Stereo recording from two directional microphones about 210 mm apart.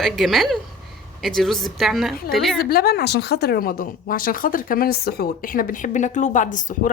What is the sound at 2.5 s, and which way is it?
A woman's voice, 45° left (ahead or behind).